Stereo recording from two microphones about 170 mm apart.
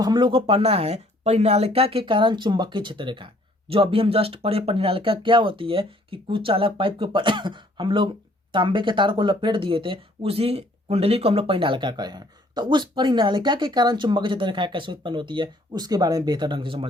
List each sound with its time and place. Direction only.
0.0 s speech: 25° right (ahead or behind)